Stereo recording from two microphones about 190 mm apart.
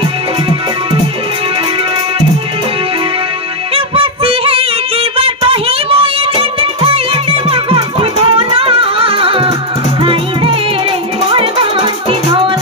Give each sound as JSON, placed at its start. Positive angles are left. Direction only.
{"t": 3.7, "sound": "music", "side_deg": -30}